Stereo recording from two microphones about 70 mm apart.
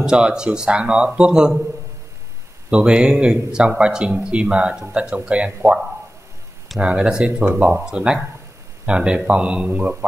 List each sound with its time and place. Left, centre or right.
0.0 s speech: centre
2.7 s speech: centre
6.8 s speech: centre